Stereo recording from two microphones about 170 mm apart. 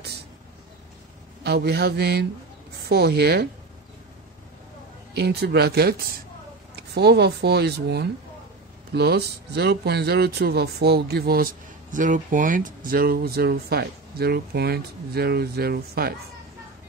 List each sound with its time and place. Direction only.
1.4 s speech: 70° right (ahead or behind)
5.1 s speech: 75° right (ahead or behind)